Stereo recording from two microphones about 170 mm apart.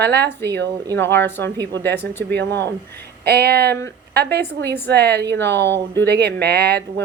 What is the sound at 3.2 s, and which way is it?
A woman's voice, 70° right (ahead or behind).